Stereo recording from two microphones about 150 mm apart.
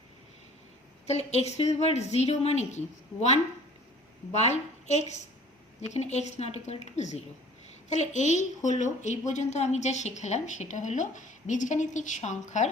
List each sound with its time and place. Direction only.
1.0 s a woman's voice: 45° left (ahead or behind)